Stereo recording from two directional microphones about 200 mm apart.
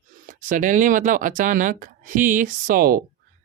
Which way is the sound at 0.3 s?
40° right (ahead or behind).